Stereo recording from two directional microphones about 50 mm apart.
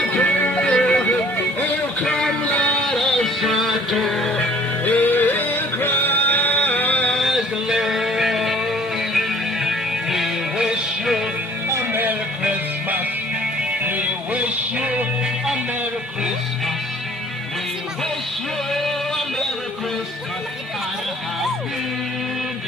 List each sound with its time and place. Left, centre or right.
0.1 s music: left
0.7 s music: centre
1.4 s a sound: left
2.4 s a sound: left
2.8 s music: centre
4.9 s music: left
7.2 s music: centre
11.8 s music: right
13.8 s music: right
18.7 s a sound: centre